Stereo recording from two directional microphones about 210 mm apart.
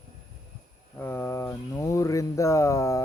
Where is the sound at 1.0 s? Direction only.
10° left (ahead or behind).